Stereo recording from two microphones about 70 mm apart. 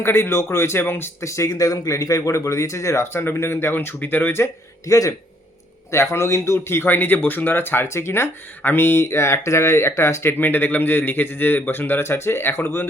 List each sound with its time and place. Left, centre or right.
0.0 s speech: left
1.2 s speech: left
4.9 s a man's voice: left
5.9 s speech: left